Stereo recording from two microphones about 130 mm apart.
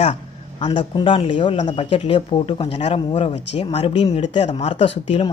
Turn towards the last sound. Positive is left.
turn(degrees=50)  # may be behind; listen again after turning